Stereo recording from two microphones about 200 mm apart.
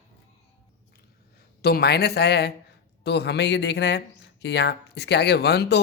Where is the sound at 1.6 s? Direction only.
55° left (ahead or behind).